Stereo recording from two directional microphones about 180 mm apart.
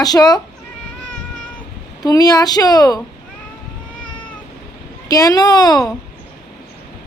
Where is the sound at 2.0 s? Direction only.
20° left (ahead or behind).